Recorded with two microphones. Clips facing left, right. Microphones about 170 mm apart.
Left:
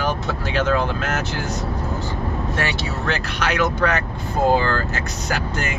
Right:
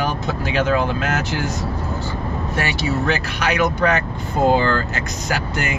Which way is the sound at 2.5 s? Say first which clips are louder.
Right 3 dB; 10° right (ahead or behind).